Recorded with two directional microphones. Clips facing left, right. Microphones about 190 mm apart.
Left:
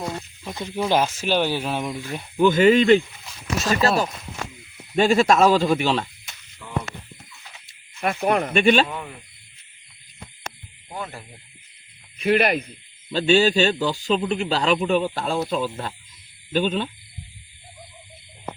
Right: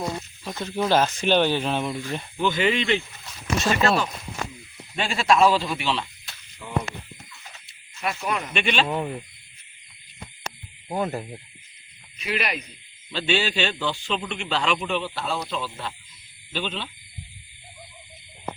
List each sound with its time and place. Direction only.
0.4 s speech: 15° left (ahead or behind)
2.4 s a man's voice: 45° left (ahead or behind)
8.0 s speech: 55° left (ahead or behind)
10.8 s speech: 40° right (ahead or behind)
12.2 s speech: 55° left (ahead or behind)
13.1 s a man's voice: 40° left (ahead or behind)